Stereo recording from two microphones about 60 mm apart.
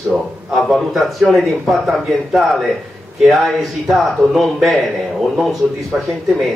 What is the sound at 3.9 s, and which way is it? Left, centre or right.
Speech, centre.